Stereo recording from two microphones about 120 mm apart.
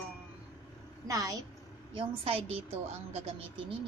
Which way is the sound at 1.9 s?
55° right (ahead or behind).